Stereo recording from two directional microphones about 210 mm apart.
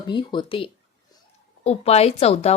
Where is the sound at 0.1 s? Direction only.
20° left (ahead or behind).